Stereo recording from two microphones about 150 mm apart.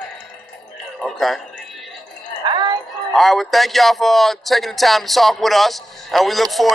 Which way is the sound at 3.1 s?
Centre (ahead or behind).